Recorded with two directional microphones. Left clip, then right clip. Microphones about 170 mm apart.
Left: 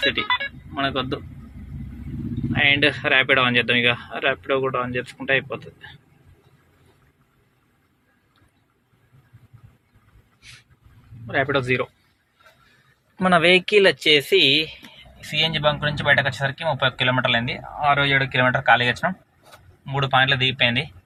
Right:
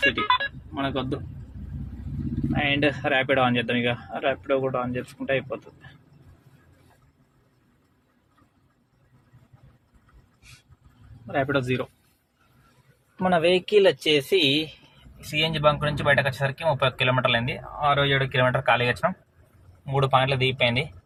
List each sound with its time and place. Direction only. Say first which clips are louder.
0.3 s music: even; 25° right (ahead or behind)
0.7 s speech: left 7 dB; centre (ahead or behind)
2.5 s speech: left 6 dB; centre (ahead or behind)
11.3 s speech: left 4 dB; centre (ahead or behind)
13.1 s speech: left 5 dB; 10° left (ahead or behind)
19.8 s speech: left 2 dB; 15° right (ahead or behind)